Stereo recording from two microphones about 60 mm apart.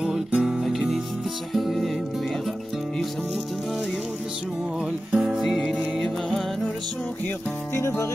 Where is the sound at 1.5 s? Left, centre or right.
Centre.